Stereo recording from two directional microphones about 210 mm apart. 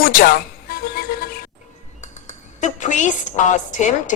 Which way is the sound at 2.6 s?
35° left (ahead or behind).